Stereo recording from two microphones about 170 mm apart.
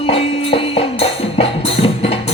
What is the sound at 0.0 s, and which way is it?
Music, 35° left (ahead or behind).